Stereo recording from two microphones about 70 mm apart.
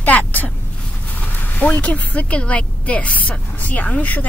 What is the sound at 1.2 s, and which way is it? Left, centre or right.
Speech, left.